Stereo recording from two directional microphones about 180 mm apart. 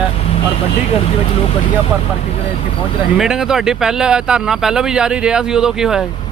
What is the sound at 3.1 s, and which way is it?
Speech, 5° right (ahead or behind).